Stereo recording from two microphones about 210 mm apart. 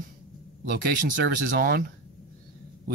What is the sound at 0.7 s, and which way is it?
Speech, 40° right (ahead or behind).